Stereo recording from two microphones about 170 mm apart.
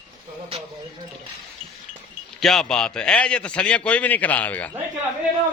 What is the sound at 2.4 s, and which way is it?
A man's voice, 5° left (ahead or behind).